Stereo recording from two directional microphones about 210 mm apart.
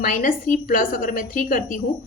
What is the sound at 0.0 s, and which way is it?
A woman's voice, 40° left (ahead or behind).